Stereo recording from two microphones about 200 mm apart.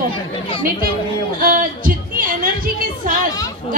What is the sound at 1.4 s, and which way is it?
A woman's voice, 45° right (ahead or behind).